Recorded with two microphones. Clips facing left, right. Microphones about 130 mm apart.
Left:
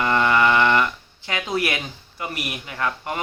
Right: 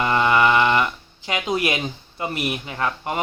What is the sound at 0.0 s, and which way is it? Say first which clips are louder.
A man's voice: right 1 dB; 20° right (ahead or behind).